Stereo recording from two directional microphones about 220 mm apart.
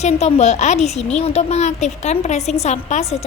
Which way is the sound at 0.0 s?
30° left (ahead or behind).